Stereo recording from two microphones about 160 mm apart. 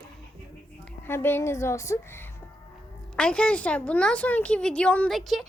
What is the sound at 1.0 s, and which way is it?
A woman's voice, 15° left (ahead or behind).